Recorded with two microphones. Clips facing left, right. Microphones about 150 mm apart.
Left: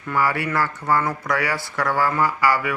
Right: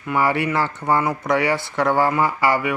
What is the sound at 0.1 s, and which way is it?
Speech, 25° right (ahead or behind).